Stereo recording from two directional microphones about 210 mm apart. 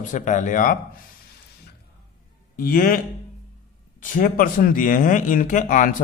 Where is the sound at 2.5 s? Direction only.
45° left (ahead or behind).